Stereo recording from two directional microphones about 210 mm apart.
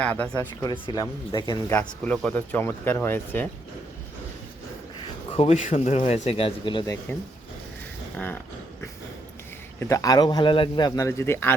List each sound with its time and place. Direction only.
0.0 s speech: 5° left (ahead or behind)
5.4 s speech: 35° left (ahead or behind); by 7.2 s 15° left (ahead or behind)
8.1 s a sound: 10° left (ahead or behind)
9.9 s speech: 15° left (ahead or behind)